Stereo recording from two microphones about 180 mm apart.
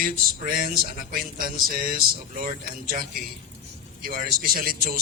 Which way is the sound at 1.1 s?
55° right (ahead or behind).